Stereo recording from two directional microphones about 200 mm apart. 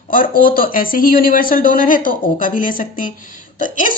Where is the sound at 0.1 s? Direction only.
45° left (ahead or behind).